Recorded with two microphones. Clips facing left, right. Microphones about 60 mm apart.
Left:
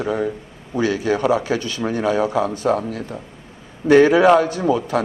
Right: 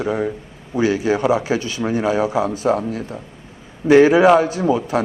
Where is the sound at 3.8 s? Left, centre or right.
Centre.